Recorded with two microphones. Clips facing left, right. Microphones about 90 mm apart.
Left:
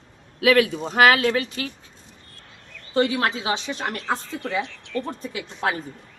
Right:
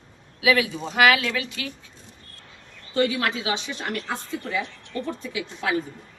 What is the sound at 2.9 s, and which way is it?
A woman's voice, 35° left (ahead or behind).